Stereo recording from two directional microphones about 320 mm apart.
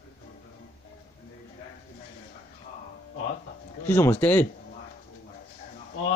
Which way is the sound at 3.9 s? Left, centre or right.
Centre.